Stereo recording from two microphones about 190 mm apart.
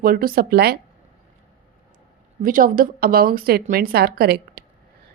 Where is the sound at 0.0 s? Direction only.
50° right (ahead or behind).